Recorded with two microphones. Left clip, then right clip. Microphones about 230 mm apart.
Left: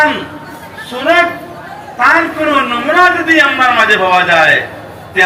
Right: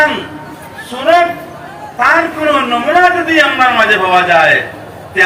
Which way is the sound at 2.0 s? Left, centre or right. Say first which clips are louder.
Left 1 dB; left.